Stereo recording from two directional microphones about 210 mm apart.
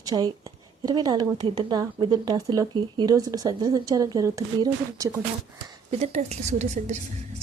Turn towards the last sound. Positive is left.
turn(degrees=-35)  # may be behind; listen again after turning